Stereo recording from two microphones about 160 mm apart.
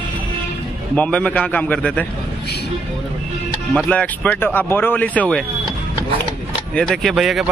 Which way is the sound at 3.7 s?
5° left (ahead or behind).